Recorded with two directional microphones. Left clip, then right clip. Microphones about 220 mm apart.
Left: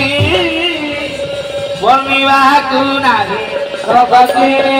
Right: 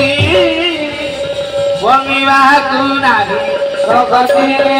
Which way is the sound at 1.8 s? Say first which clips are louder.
Left 3 dB; 15° left (ahead or behind).